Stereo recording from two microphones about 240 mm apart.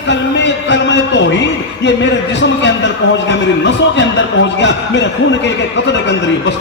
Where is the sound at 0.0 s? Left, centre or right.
Left.